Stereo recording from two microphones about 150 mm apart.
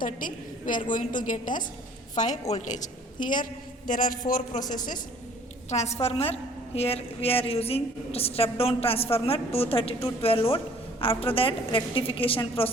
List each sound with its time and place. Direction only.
0.0 s a woman's voice: 65° left (ahead or behind)
5.7 s a woman's voice: 50° left (ahead or behind)